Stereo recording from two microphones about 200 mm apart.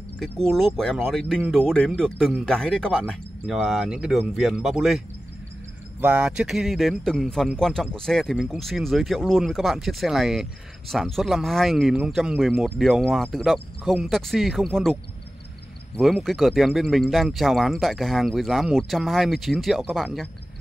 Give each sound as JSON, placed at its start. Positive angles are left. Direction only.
{"t": 0.2, "sound": "speech", "side_deg": 0}
{"t": 16.0, "sound": "speech", "side_deg": 0}